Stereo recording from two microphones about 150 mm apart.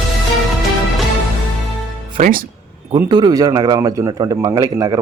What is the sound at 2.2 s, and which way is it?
Speech, 70° right (ahead or behind).